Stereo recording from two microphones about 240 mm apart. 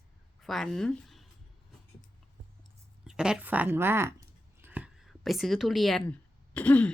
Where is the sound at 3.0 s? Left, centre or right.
Centre.